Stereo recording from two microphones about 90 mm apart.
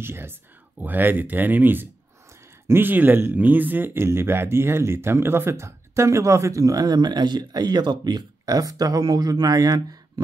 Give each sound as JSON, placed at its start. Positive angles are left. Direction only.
{"t": 0.0, "sound": "speech", "side_deg": -25}